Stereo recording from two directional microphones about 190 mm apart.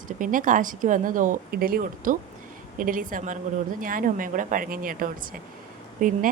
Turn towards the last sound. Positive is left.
turn(degrees=-45)  # may be behind; listen again after turning